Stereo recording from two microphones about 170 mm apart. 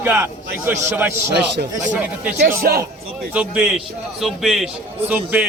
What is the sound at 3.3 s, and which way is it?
A man's voice, 5° right (ahead or behind).